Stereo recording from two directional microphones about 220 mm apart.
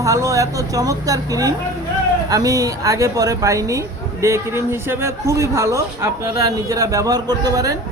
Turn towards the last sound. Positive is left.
turn(degrees=-15)  # may be behind; listen again after turning